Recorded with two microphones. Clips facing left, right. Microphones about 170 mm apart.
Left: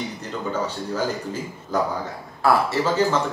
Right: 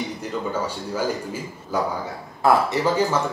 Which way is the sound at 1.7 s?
10° right (ahead or behind).